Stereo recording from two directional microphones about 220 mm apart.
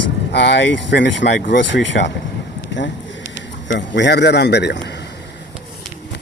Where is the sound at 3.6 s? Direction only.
55° left (ahead or behind).